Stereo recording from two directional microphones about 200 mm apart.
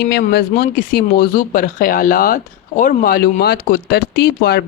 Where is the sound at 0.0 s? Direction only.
55° left (ahead or behind).